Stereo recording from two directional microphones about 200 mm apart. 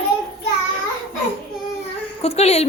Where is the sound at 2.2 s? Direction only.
30° left (ahead or behind).